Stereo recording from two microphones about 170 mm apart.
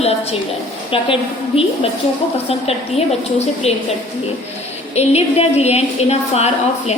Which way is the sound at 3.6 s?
35° left (ahead or behind).